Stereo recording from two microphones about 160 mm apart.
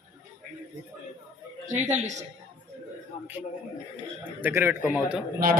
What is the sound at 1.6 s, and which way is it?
Speech, 50° right (ahead or behind).